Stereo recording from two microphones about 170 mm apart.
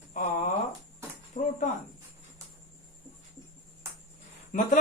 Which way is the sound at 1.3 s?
45° left (ahead or behind).